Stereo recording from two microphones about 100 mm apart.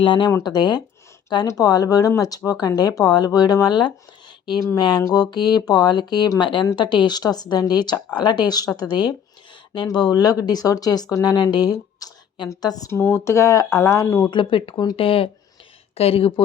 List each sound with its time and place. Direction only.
0.0 s a woman's voice: 55° left (ahead or behind)
12.9 s speech: 25° left (ahead or behind)
14.3 s speech: 55° left (ahead or behind)
16.0 s speech: 80° left